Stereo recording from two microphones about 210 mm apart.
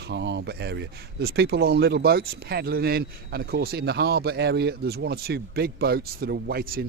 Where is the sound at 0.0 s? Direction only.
55° right (ahead or behind).